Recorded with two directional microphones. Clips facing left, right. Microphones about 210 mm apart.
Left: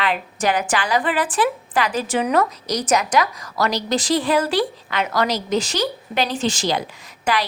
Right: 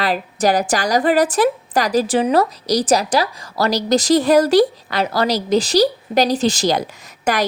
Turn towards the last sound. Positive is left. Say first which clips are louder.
# right 2 dB
turn(degrees=-45)  # may be behind; listen again after turning